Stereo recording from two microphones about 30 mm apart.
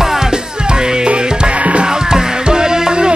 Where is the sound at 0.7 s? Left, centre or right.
Right.